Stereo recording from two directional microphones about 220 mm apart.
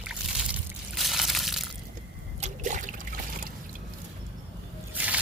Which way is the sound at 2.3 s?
35° right (ahead or behind).